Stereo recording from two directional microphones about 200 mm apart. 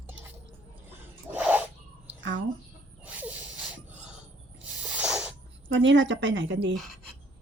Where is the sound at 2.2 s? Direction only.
65° right (ahead or behind).